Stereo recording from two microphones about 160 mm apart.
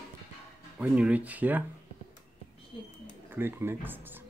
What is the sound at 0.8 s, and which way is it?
Speech, 10° right (ahead or behind).